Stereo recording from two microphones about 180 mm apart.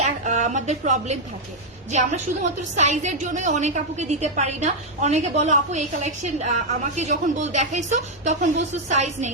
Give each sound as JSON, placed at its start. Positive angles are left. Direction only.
{"t": 0.0, "sound": "a woman's voice", "side_deg": -40}